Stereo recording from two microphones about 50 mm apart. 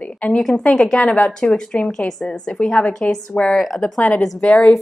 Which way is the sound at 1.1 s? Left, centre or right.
Left.